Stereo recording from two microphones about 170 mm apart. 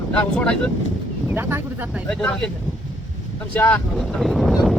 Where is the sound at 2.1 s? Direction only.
5° left (ahead or behind).